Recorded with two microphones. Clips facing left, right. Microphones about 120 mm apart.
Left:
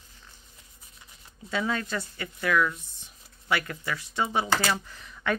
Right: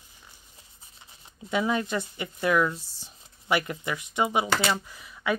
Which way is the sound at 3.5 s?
20° right (ahead or behind).